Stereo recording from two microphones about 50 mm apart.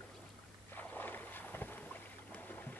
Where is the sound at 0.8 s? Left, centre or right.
Left.